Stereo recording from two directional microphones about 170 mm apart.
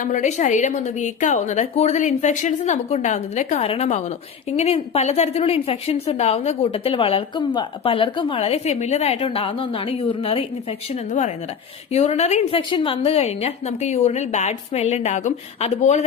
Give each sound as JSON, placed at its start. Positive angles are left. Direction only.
{"t": 0.0, "sound": "a woman's voice", "side_deg": 45}
{"t": 11.9, "sound": "a woman's voice", "side_deg": 40}